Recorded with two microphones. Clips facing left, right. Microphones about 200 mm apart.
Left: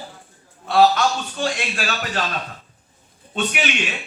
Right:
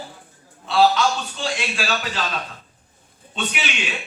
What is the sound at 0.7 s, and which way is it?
A man's voice, 50° left (ahead or behind).